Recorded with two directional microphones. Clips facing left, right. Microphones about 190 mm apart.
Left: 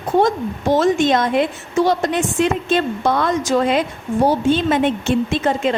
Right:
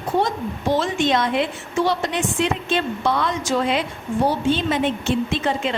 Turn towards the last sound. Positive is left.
turn(degrees=45)  # may be behind; listen again after turning